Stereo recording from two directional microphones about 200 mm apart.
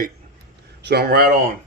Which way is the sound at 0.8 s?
55° right (ahead or behind).